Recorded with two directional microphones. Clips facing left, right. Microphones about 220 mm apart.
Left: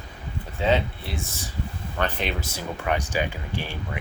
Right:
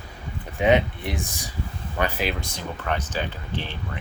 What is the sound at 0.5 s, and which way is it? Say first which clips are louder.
Speech: right 4 dB; 15° right (ahead or behind).